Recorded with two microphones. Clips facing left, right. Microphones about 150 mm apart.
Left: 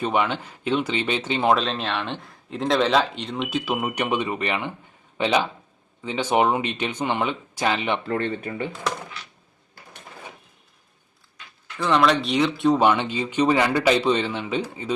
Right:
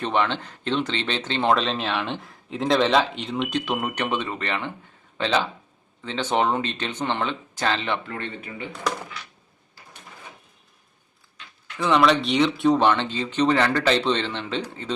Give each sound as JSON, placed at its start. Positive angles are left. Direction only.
{"t": 0.0, "sound": "speech", "side_deg": 10}
{"t": 8.0, "sound": "speech", "side_deg": 40}
{"t": 11.8, "sound": "speech", "side_deg": 0}
{"t": 12.8, "sound": "speech", "side_deg": 10}